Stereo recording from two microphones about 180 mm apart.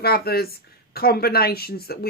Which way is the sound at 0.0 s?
60° left (ahead or behind).